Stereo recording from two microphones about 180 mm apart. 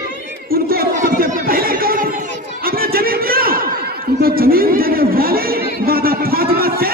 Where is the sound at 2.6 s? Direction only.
55° right (ahead or behind).